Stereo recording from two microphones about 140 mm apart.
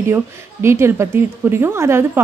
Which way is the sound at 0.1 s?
20° right (ahead or behind).